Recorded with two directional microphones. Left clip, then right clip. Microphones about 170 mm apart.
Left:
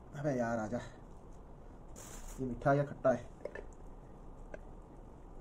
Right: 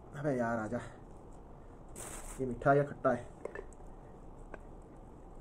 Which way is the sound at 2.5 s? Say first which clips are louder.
Right 3 dB; 5° right (ahead or behind).